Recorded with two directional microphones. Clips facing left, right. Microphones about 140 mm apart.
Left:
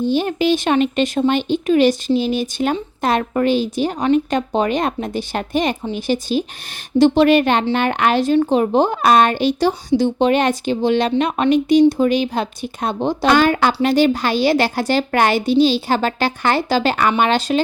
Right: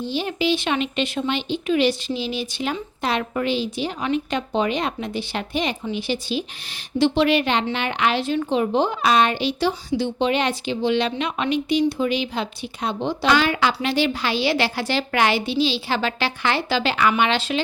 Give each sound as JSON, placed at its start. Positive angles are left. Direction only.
{"t": 0.0, "sound": "speech", "side_deg": 50}